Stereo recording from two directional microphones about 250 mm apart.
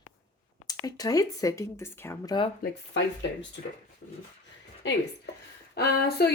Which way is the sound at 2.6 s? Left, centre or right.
Left.